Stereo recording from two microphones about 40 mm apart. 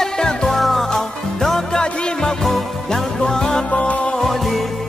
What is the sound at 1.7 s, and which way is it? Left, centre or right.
Music, left.